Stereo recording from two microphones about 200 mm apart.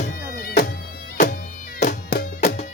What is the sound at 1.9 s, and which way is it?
Music, 45° left (ahead or behind).